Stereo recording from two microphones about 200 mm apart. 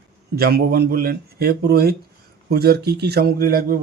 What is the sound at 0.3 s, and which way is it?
Speech, 50° right (ahead or behind).